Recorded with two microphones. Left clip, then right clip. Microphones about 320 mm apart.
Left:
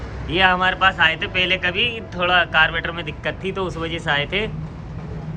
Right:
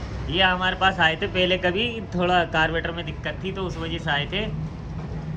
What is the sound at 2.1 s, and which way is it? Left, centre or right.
Speech, centre.